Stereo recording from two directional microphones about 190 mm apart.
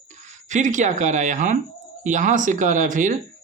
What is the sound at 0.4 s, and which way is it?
Speech, 40° right (ahead or behind).